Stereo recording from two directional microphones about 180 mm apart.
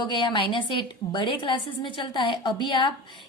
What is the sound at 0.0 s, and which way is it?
A woman's voice, 25° left (ahead or behind).